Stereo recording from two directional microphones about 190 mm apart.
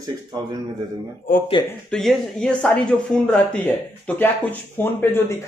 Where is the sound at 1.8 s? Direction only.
5° left (ahead or behind).